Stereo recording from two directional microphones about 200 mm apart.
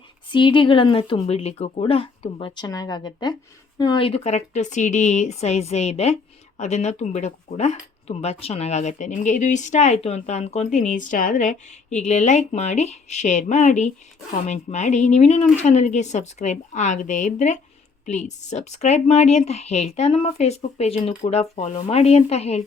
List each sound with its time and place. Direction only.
0.3 s speech: 25° left (ahead or behind)